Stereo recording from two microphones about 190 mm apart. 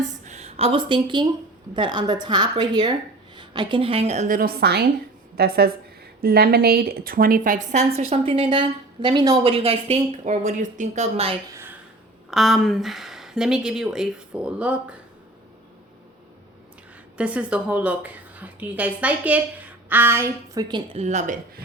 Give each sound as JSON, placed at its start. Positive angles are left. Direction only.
{"t": 0.0, "sound": "a woman's voice", "side_deg": -35}
{"t": 11.5, "sound": "a sound", "side_deg": -10}
{"t": 12.3, "sound": "speech", "side_deg": 0}
{"t": 17.2, "sound": "a woman's voice", "side_deg": -5}
{"t": 21.0, "sound": "a woman's voice", "side_deg": -40}